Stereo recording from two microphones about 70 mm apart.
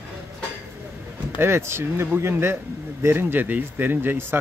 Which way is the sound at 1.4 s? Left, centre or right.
Right.